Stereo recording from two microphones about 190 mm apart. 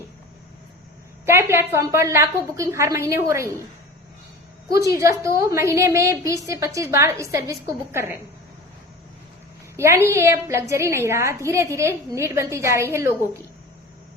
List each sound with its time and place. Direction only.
1.2 s a woman's voice: 15° right (ahead or behind)
4.8 s a woman's voice: 15° right (ahead or behind)
9.7 s a woman's voice: 15° right (ahead or behind)